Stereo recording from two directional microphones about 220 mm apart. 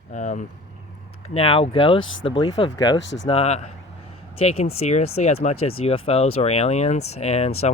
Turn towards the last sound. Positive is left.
turn(degrees=30)  # may be behind; listen again after turning